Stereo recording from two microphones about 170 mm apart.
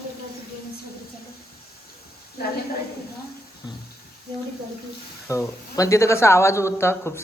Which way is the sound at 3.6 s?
25° left (ahead or behind).